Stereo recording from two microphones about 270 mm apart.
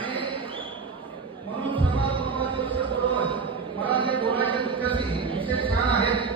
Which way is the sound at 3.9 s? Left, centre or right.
Centre.